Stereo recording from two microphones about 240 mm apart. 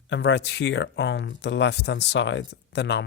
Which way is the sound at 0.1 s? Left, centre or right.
Left.